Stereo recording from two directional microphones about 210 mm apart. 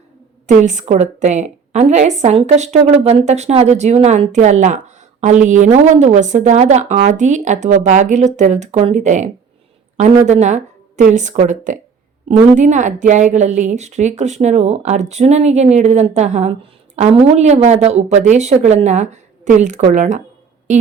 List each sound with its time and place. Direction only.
0.4 s a woman's voice: 35° right (ahead or behind)